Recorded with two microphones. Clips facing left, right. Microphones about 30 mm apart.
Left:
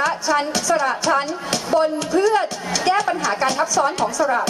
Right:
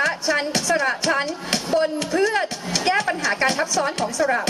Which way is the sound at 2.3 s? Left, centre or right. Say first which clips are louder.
Left 3 dB; centre.